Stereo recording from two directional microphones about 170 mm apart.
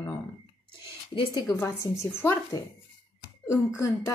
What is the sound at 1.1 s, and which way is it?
A woman's voice, 20° left (ahead or behind).